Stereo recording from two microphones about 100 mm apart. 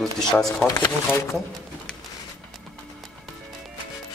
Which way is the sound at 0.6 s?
40° left (ahead or behind).